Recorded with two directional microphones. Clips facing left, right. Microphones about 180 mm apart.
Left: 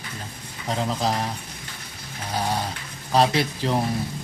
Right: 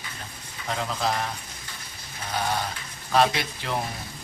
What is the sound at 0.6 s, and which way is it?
Speech, 30° left (ahead or behind).